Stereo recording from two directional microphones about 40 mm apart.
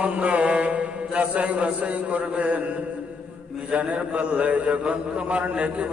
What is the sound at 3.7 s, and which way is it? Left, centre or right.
A man's voice, right.